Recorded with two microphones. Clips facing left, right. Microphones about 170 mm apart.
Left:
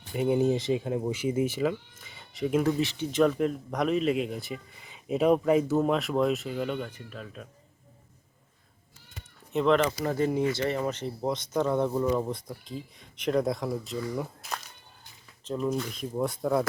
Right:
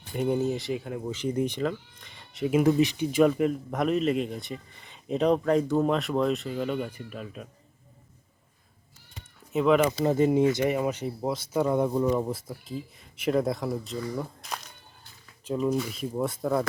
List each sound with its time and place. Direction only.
0.1 s speech: 5° left (ahead or behind)
0.3 s speech: 20° left (ahead or behind)
1.1 s speech: 5° left (ahead or behind)
2.6 s speech: 15° right (ahead or behind)
9.5 s speech: 5° right (ahead or behind)
9.9 s speech: 20° right (ahead or behind); by 14.3 s centre (ahead or behind)
15.5 s speech: 5° right (ahead or behind)